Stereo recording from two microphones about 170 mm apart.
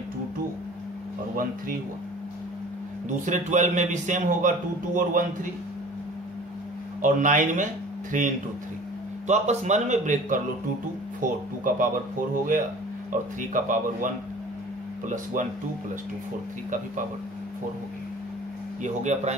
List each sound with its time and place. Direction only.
1.3 s speech: 55° right (ahead or behind)
3.1 s a man's voice: 45° right (ahead or behind)
7.0 s speech: 50° right (ahead or behind)
9.3 s a man's voice: 40° right (ahead or behind)
13.4 s a man's voice: 50° right (ahead or behind)
15.4 s a man's voice: 50° right (ahead or behind)
18.8 s a man's voice: 45° right (ahead or behind)